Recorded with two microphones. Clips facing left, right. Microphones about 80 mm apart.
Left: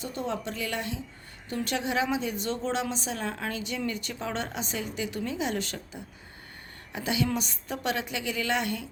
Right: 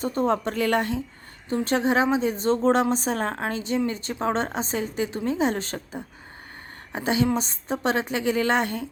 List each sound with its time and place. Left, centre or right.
0.0 s a woman's voice: right
1.5 s a woman's voice: right